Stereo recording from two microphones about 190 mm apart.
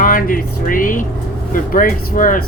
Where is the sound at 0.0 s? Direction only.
45° left (ahead or behind).